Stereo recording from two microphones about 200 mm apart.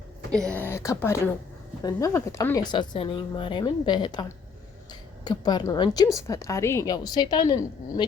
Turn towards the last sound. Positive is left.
turn(degrees=20)  # may be behind; listen again after turning